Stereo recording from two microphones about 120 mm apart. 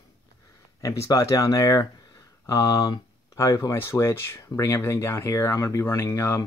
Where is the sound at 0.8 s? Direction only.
25° left (ahead or behind).